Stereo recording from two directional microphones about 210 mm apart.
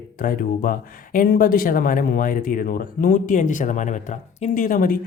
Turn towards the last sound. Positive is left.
turn(degrees=40)  # may be behind; listen again after turning